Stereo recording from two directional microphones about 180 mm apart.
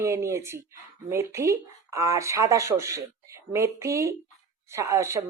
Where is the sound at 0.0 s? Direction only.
15° right (ahead or behind).